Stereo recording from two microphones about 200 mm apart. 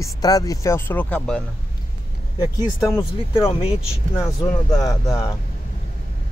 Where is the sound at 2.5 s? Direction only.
15° left (ahead or behind).